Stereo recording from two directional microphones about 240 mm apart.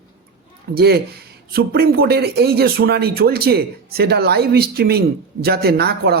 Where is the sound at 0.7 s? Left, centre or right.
Right.